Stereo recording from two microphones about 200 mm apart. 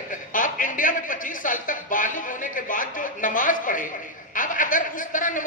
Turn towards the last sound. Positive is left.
turn(degrees=40)  # may be behind; listen again after turning